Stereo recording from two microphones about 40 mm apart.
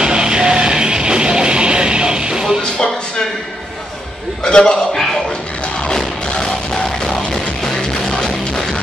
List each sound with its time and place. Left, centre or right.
0.0 s music: right
2.6 s music: centre
4.5 s a man's voice: left
5.9 s music: centre